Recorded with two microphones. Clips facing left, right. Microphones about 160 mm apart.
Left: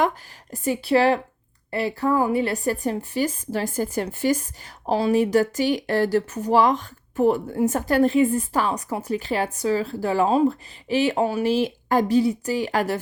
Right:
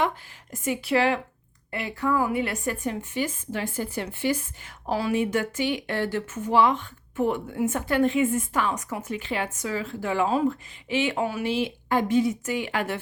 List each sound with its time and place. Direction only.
0.5 s a woman's voice: 35° left (ahead or behind)